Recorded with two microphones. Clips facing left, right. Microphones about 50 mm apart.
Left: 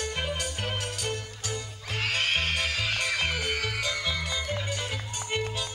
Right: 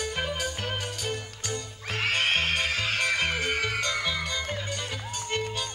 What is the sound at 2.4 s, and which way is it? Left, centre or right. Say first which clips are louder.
Music: right 2 dB; centre.